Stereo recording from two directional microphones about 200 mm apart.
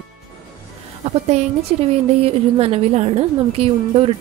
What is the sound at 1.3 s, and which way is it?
A woman's voice, 35° right (ahead or behind).